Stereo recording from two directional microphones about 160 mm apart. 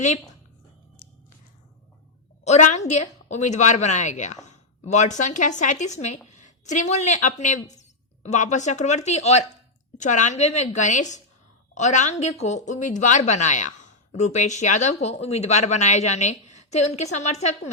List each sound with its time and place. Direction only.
2.4 s a woman's voice: 45° left (ahead or behind)